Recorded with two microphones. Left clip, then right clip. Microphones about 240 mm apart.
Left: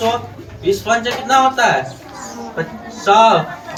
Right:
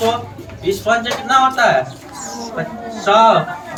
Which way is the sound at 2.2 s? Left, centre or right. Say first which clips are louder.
Right 3 dB; right.